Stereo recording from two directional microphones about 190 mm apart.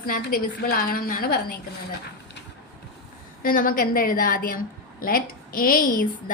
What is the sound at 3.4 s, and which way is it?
A woman's voice, 50° left (ahead or behind).